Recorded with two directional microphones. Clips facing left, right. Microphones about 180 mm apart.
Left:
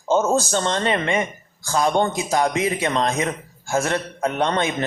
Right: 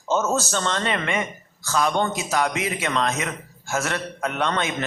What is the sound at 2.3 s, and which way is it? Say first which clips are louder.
A man's voice: left 4 dB; 25° left (ahead or behind).